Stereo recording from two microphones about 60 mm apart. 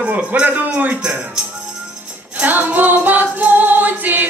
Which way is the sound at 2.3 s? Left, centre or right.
Right.